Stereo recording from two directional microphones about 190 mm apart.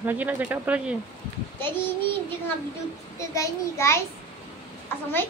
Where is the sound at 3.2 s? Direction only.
15° left (ahead or behind).